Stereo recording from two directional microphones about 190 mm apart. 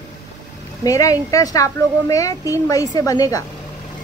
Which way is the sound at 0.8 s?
15° left (ahead or behind).